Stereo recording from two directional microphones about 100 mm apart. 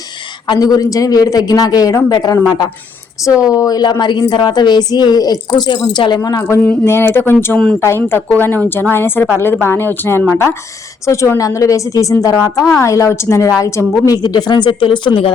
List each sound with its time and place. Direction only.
0.4 s a woman's voice: 45° left (ahead or behind)
3.5 s a woman's voice: 40° left (ahead or behind)
6.7 s a woman's voice: 25° left (ahead or behind); by 15.3 s 60° left (ahead or behind)